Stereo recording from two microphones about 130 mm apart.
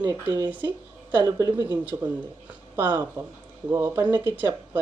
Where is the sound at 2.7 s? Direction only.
15° right (ahead or behind).